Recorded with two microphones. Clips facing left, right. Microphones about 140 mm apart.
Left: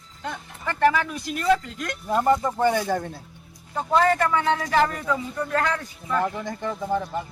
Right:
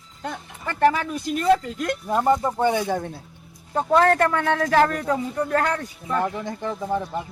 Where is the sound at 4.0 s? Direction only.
60° right (ahead or behind); by 6.2 s 35° right (ahead or behind).